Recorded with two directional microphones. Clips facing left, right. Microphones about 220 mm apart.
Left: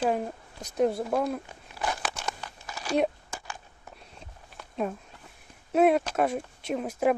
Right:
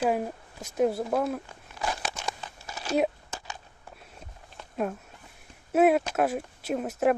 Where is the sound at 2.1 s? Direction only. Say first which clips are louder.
Even; 20° right (ahead or behind).